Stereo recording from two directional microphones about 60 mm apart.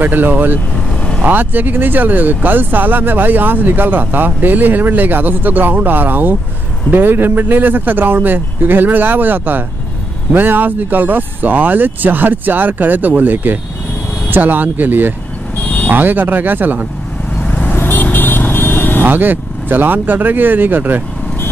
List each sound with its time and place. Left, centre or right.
0.0 s speech: right
17.5 s vehicle: left
19.0 s speech: right